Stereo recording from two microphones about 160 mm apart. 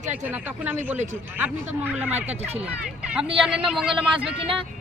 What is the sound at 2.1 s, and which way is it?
Speech, 40° right (ahead or behind).